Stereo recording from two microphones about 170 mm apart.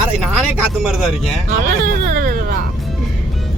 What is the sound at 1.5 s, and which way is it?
Speech, 55° right (ahead or behind).